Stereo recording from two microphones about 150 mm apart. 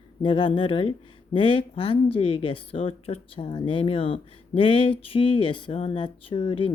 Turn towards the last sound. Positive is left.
turn(degrees=35)  # may be behind; listen again after turning